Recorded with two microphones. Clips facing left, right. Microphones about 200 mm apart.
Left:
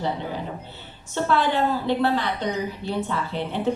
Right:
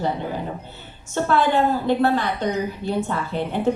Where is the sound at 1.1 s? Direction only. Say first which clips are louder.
Right 3 dB; 50° right (ahead or behind).